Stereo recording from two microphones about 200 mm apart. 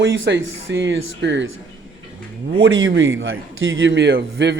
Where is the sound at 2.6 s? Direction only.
75° right (ahead or behind).